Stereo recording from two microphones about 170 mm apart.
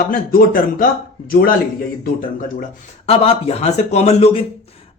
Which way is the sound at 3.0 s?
35° left (ahead or behind).